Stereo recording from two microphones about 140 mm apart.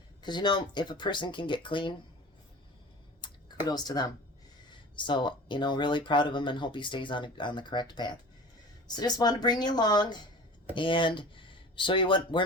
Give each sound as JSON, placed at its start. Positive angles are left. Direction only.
{"t": 0.2, "sound": "speech", "side_deg": 30}
{"t": 3.2, "sound": "speech", "side_deg": 30}